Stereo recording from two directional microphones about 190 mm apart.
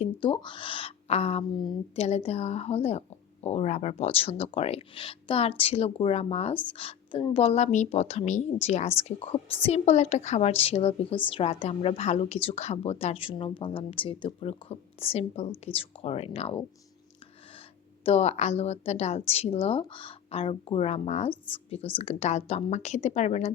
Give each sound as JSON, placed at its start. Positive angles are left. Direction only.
{"t": 0.0, "sound": "a woman's voice", "side_deg": 25}
{"t": 18.0, "sound": "a woman's voice", "side_deg": 35}